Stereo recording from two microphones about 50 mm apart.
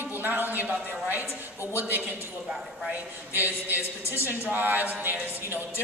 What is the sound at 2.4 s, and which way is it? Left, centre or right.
Speech, centre.